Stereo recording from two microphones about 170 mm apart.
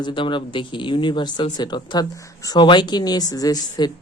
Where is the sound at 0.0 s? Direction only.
25° left (ahead or behind).